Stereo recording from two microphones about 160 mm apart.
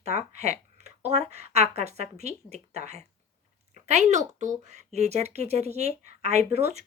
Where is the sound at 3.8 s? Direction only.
45° right (ahead or behind).